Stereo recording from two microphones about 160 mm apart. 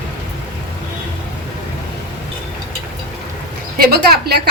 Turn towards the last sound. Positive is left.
turn(degrees=-90)